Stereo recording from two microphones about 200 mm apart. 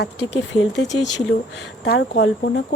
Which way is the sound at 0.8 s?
65° left (ahead or behind).